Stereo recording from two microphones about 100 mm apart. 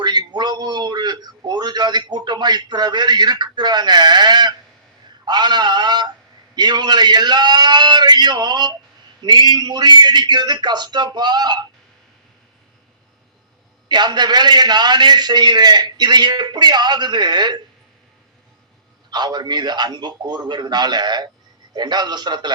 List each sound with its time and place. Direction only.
0.0 s a man's voice: 45° right (ahead or behind)
13.8 s a man's voice: 45° right (ahead or behind)
19.1 s a man's voice: 45° right (ahead or behind)